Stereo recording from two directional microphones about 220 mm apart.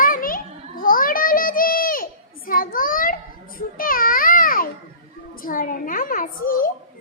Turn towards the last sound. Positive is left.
turn(degrees=40)  # may be behind; listen again after turning